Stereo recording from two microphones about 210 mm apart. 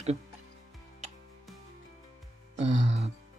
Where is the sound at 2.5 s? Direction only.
35° right (ahead or behind).